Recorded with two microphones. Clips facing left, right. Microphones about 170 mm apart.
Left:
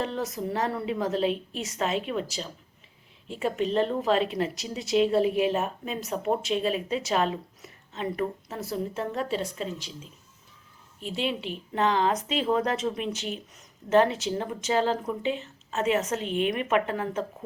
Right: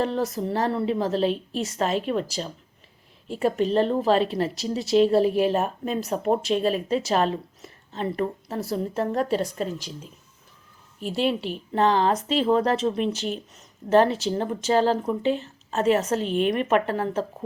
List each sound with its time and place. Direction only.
0.0 s speech: 35° right (ahead or behind)